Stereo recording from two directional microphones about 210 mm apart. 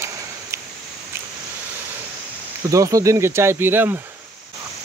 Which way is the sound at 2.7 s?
15° right (ahead or behind).